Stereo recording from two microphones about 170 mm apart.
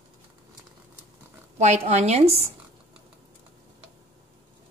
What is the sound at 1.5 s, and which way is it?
Speech, 40° right (ahead or behind).